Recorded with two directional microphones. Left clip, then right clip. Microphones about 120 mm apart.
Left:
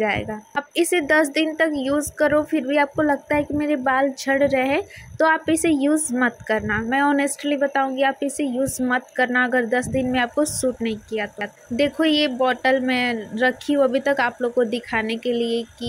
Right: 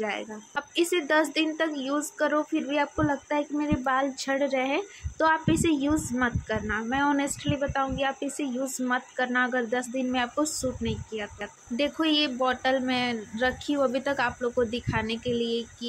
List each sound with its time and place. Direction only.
0.0 s speech: 40° left (ahead or behind)